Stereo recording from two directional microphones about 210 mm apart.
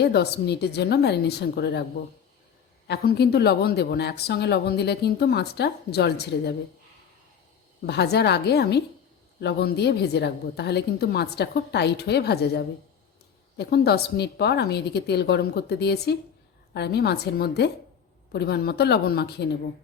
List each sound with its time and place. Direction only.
0.0 s speech: 50° left (ahead or behind)
2.8 s speech: 50° left (ahead or behind)
7.9 s speech: 50° left (ahead or behind)